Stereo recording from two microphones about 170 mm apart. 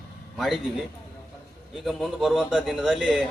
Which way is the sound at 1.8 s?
Centre (ahead or behind).